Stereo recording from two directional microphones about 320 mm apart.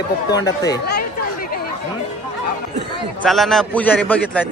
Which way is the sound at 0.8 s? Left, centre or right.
Left.